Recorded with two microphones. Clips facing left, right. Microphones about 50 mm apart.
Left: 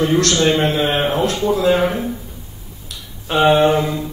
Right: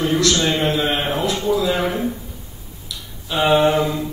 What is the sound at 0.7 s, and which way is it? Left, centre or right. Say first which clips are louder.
Speech: left 2 dB; left.